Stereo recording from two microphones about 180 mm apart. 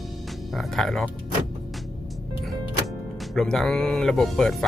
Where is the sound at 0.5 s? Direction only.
Centre (ahead or behind).